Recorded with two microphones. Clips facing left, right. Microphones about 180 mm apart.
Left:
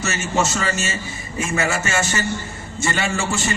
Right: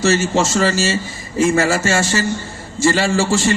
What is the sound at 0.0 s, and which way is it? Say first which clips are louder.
A man's voice: right 6 dB; 30° right (ahead or behind).